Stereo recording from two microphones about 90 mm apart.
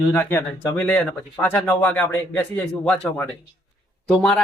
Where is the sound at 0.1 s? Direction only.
25° left (ahead or behind).